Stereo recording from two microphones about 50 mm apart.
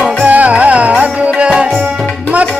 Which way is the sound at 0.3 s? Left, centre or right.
Right.